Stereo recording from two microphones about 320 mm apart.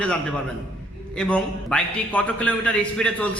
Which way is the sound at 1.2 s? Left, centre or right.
Centre.